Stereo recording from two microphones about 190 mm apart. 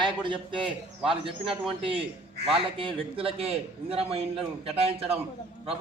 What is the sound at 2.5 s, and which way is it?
A man's voice, 30° right (ahead or behind).